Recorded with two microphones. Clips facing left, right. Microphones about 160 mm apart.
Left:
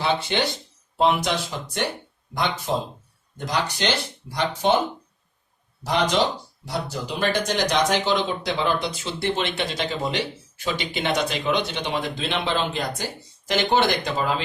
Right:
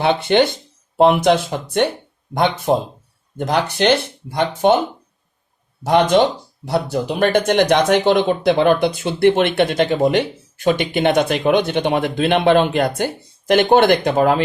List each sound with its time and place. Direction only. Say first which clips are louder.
0.0 s speech: right 8 dB; 55° right (ahead or behind)
5.8 s speech: right 8 dB; 55° right (ahead or behind)